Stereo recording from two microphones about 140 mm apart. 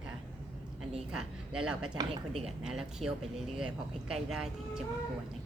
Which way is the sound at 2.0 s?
30° right (ahead or behind).